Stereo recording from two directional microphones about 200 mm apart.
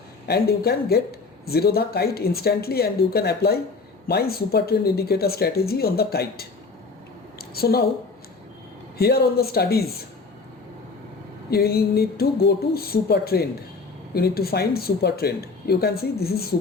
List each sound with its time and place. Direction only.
0.3 s speech: 50° left (ahead or behind)
7.3 s a sound: 50° left (ahead or behind)
9.0 s speech: 50° left (ahead or behind)
11.5 s speech: 50° left (ahead or behind)